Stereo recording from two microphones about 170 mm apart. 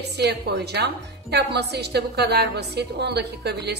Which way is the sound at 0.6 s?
75° right (ahead or behind).